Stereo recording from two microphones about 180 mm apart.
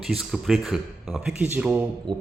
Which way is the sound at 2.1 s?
25° right (ahead or behind).